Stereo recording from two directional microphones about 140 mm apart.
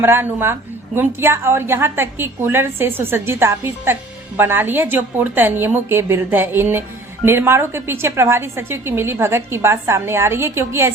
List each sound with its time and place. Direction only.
0.0 s a woman's voice: 15° right (ahead or behind)